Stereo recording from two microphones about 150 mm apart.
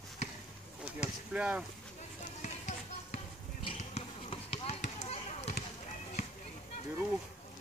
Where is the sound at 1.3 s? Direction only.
10° right (ahead or behind).